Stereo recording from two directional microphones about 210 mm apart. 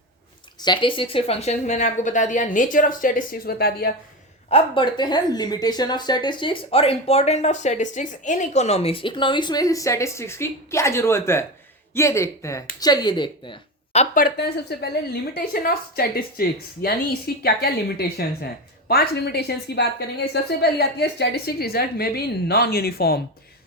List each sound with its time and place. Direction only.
0.6 s a woman's voice: 20° left (ahead or behind); by 3.9 s 45° left (ahead or behind)
4.4 s a woman's voice: 25° left (ahead or behind); by 23.2 s 45° left (ahead or behind)